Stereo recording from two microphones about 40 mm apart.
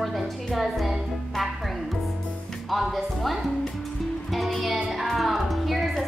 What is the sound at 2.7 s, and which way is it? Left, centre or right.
Music, centre.